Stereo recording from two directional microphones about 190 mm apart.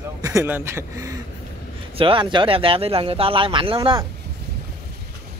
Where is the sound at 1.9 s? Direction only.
25° right (ahead or behind).